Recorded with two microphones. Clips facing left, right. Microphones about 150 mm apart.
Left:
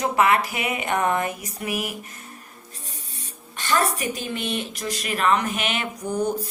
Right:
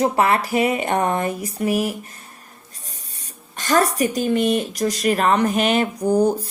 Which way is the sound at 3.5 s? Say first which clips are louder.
Right 5 dB; 40° right (ahead or behind).